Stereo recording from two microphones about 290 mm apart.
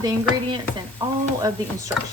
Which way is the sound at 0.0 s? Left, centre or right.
Centre.